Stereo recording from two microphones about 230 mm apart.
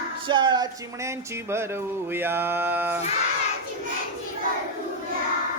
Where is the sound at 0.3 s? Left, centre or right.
Right.